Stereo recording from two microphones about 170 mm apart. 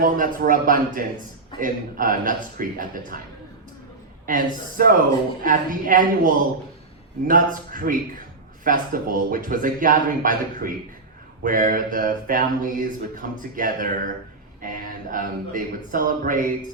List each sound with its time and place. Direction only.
0.0 s a man's voice: 55° right (ahead or behind)
4.3 s a man's voice: 55° right (ahead or behind)